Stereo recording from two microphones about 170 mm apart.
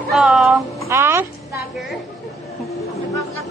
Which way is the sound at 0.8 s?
15° right (ahead or behind).